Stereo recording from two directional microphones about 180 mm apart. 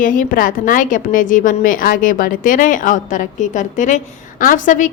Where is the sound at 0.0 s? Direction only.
50° left (ahead or behind).